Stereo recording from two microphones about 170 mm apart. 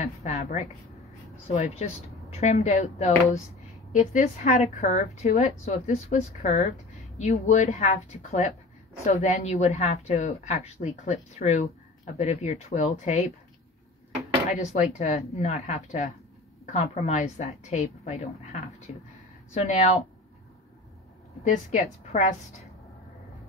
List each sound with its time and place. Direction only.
0.0 s a woman's voice: 40° left (ahead or behind)
14.5 s a woman's voice: 45° left (ahead or behind)
21.5 s a woman's voice: 50° left (ahead or behind)